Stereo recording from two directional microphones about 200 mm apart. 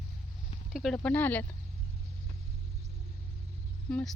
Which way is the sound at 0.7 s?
Centre (ahead or behind).